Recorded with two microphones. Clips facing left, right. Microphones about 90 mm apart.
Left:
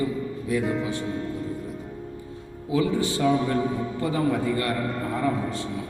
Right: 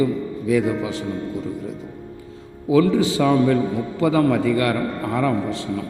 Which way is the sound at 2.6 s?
85° right.